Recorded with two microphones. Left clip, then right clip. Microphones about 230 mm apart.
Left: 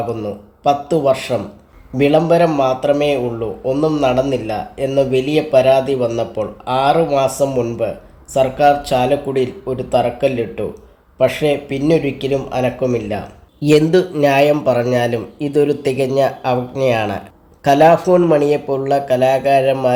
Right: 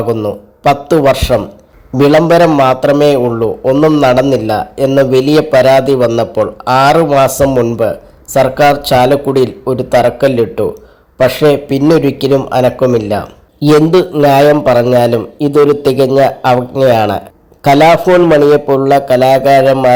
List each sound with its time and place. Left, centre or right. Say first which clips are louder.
0.0 s a man's voice: right 8 dB; right